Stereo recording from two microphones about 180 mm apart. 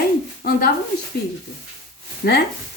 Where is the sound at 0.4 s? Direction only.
60° left (ahead or behind).